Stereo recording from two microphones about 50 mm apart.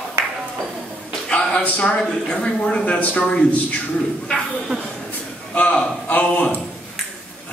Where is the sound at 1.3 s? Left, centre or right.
Left.